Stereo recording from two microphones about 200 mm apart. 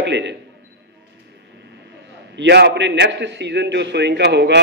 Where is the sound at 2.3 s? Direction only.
60° right (ahead or behind).